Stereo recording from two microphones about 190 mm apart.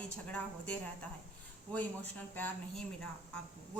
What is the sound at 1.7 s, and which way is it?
A woman's voice, 10° left (ahead or behind).